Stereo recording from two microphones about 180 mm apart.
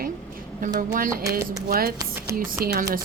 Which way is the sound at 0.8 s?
50° right (ahead or behind).